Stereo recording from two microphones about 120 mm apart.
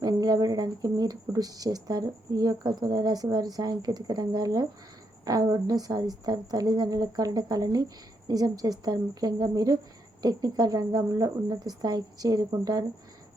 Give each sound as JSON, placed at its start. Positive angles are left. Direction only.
{"t": 0.0, "sound": "speech", "side_deg": -30}